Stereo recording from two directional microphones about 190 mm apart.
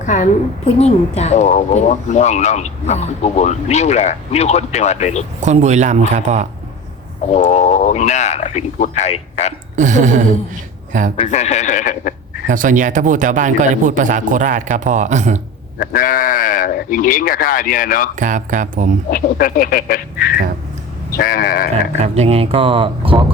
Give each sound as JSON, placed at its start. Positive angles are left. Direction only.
{"t": 0.0, "sound": "a woman's voice", "side_deg": 40}
{"t": 5.4, "sound": "speech", "side_deg": -35}
{"t": 7.3, "sound": "a woman's voice", "side_deg": 40}
{"t": 9.7, "sound": "speech", "side_deg": -40}
{"t": 11.2, "sound": "a woman's voice", "side_deg": 35}
{"t": 12.5, "sound": "speech", "side_deg": -45}
{"t": 15.8, "sound": "speech", "side_deg": 45}
{"t": 18.2, "sound": "speech", "side_deg": -40}
{"t": 19.1, "sound": "speech", "side_deg": 50}
{"t": 21.7, "sound": "speech", "side_deg": -35}